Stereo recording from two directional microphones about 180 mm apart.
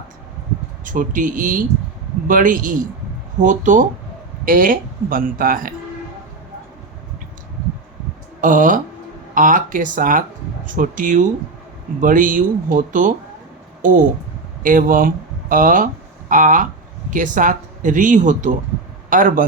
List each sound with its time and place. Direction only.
0.9 s speech: 45° right (ahead or behind)
8.4 s speech: 45° right (ahead or behind)
14.6 s speech: 50° right (ahead or behind)